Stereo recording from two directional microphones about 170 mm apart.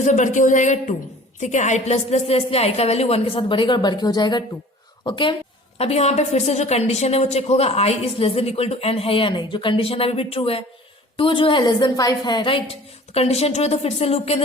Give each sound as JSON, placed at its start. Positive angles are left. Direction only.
{"t": 0.0, "sound": "a woman's voice", "side_deg": 45}